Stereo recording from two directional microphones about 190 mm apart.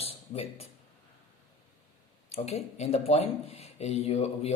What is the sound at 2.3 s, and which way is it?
Speech, 35° left (ahead or behind).